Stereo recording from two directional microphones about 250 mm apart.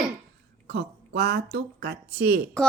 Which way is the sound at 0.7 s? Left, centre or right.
Right.